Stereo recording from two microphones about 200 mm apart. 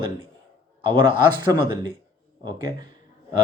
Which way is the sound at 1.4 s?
20° right (ahead or behind).